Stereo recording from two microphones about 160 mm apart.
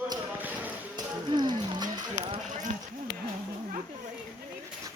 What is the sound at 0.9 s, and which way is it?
Run, 25° right (ahead or behind).